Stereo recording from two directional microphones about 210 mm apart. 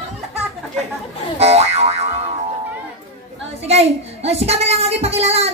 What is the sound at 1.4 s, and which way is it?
Boing, 30° right (ahead or behind).